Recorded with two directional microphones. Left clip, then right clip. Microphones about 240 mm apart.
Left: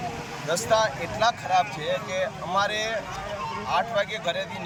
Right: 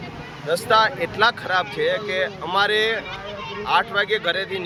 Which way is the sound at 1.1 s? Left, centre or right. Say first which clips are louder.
Right 2 dB; centre.